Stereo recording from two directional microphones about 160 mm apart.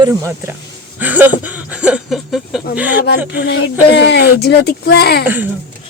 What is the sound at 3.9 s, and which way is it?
Speech, 90° left.